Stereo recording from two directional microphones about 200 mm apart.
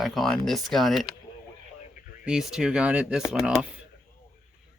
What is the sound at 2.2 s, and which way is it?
Speech, 5° right (ahead or behind).